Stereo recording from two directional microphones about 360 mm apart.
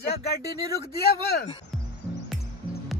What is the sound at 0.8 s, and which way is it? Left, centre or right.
Speech, left.